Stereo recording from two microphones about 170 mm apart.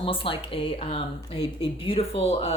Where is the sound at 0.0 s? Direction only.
30° left (ahead or behind).